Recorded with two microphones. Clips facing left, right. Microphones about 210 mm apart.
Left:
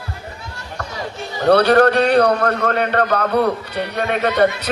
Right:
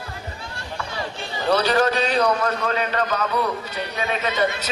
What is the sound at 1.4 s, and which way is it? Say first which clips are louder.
Speech: left 7 dB; 60° left (ahead or behind).